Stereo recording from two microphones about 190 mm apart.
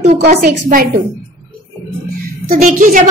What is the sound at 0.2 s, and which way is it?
Speech, 50° right (ahead or behind).